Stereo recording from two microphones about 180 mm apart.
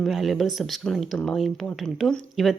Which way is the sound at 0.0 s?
Centre (ahead or behind).